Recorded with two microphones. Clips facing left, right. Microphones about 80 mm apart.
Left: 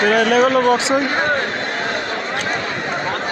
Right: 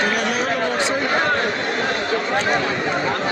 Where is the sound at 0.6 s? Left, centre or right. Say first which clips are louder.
Left 7 dB; left.